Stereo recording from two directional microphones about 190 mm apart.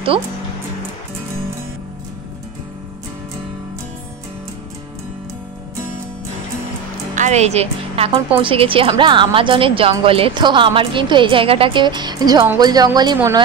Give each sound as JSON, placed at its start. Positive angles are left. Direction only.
{"t": 7.2, "sound": "a woman's voice", "side_deg": -35}